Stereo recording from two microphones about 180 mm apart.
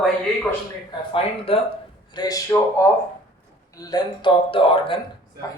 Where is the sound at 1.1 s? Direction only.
30° left (ahead or behind).